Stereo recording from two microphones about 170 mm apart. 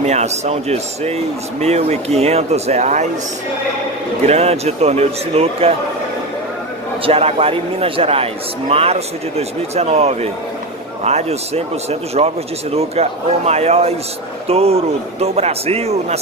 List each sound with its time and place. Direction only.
0.0 s speech: 40° right (ahead or behind)
4.3 s speech: 40° right (ahead or behind)
7.1 s speech: 35° right (ahead or behind)